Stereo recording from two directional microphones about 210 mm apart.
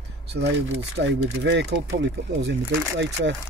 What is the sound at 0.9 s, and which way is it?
Speech, 60° right (ahead or behind).